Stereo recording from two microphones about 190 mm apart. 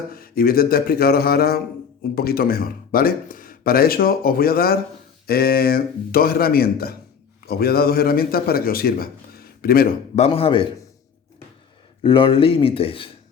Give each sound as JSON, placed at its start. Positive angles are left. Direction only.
{"t": 0.1, "sound": "speech", "side_deg": 50}
{"t": 10.2, "sound": "speech", "side_deg": 30}
{"t": 12.0, "sound": "speech", "side_deg": 25}